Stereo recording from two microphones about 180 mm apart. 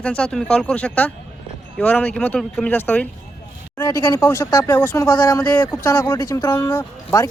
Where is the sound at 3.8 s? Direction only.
20° left (ahead or behind).